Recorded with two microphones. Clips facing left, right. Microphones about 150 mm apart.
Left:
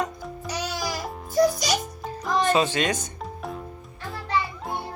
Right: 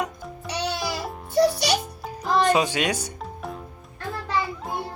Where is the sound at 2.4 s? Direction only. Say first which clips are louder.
Even; 10° right (ahead or behind).